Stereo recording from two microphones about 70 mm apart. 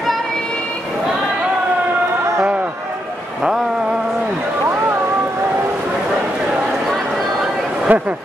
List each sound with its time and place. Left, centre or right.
7.9 s speech: right